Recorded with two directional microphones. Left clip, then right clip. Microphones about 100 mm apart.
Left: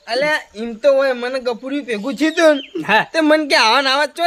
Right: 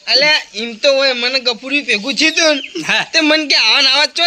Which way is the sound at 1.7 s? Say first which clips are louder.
Right 7 dB; 20° left (ahead or behind).